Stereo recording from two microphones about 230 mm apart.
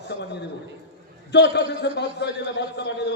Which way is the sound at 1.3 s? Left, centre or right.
Left.